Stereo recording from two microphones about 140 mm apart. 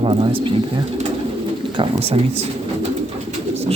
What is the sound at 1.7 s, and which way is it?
Speech, 40° right (ahead or behind).